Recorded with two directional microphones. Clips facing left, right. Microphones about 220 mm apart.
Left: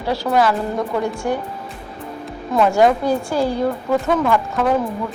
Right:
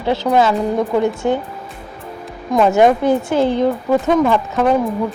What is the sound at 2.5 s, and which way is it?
Speech, 20° right (ahead or behind).